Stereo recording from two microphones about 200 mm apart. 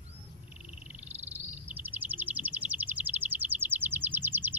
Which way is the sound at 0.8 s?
10° right (ahead or behind).